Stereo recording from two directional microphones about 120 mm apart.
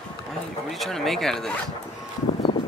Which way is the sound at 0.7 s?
Centre (ahead or behind).